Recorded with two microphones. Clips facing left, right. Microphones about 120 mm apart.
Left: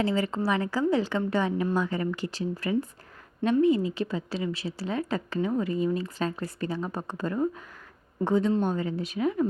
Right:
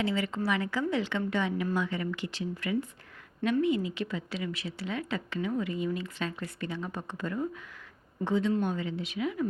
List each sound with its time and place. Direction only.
0.0 s a woman's voice: 40° left (ahead or behind)